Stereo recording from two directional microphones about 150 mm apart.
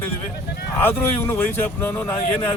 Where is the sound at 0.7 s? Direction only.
15° left (ahead or behind).